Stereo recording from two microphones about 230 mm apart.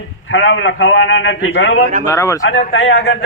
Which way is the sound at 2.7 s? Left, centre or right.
Left.